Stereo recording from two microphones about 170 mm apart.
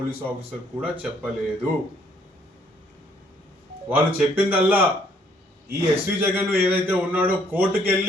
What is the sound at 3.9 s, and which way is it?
A man's voice, 10° right (ahead or behind).